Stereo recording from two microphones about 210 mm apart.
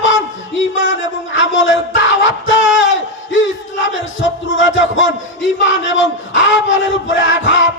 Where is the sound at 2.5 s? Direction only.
65° left (ahead or behind).